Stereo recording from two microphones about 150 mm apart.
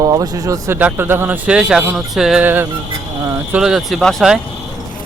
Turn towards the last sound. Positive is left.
turn(degrees=0)  # may be behind; listen again after turning